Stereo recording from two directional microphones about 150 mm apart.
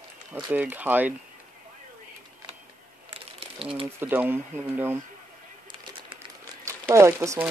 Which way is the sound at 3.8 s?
15° right (ahead or behind).